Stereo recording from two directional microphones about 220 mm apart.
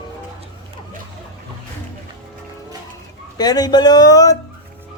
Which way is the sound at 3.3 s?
15° left (ahead or behind).